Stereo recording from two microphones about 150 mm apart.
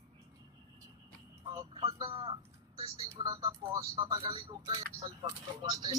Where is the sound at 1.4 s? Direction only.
25° right (ahead or behind).